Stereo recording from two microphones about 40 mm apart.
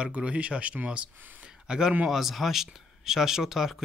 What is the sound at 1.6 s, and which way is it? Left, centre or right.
Speech, centre.